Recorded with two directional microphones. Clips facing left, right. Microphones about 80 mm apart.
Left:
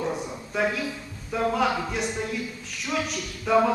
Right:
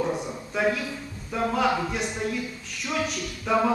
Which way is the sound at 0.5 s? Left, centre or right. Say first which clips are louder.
Right 1 dB; centre.